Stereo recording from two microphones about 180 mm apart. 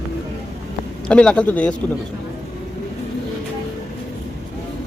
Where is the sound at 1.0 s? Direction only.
5° left (ahead or behind).